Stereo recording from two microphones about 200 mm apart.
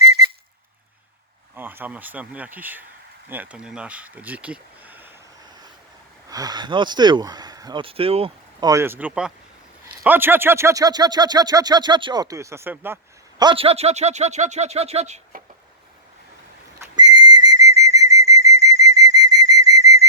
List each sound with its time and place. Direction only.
1.5 s speech: 10° right (ahead or behind)
6.2 s speech: 20° right (ahead or behind)
8.7 s speech: 10° right (ahead or behind)
13.4 s speech: 25° right (ahead or behind)
16.8 s whistle: 20° right (ahead or behind)